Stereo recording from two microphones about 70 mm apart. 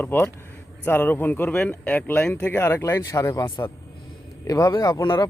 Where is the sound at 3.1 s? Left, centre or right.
Left.